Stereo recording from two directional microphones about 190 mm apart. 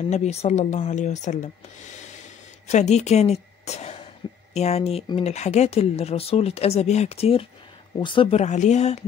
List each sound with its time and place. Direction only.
0.1 s a woman's voice: 35° left (ahead or behind)
8.4 s speech: 40° left (ahead or behind)